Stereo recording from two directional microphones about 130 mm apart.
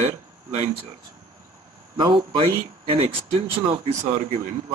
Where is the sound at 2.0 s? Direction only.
35° right (ahead or behind).